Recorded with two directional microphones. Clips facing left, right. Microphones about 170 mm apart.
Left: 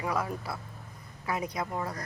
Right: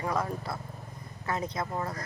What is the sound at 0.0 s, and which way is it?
Speech, 10° left (ahead or behind).